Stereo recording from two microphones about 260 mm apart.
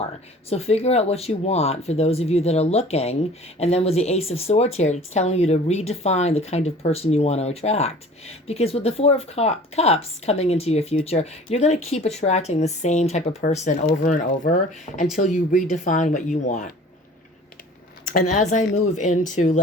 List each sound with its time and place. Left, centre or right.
0.5 s speech: left
18.0 s speech: left